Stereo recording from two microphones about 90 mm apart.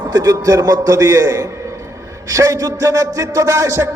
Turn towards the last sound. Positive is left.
turn(degrees=-35)  # may be behind; listen again after turning